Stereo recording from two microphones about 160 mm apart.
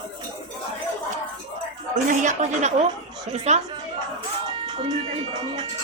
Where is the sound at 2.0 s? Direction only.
50° right (ahead or behind).